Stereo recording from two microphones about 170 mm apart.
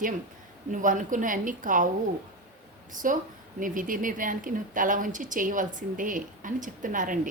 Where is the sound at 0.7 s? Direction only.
50° right (ahead or behind).